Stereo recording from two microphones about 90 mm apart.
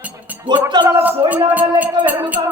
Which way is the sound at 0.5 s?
60° right (ahead or behind).